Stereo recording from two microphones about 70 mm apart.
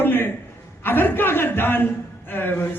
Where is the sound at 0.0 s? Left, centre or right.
Left.